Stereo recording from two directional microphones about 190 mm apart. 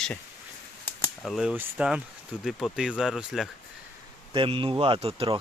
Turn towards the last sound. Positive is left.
turn(degrees=-30)  # may be behind; listen again after turning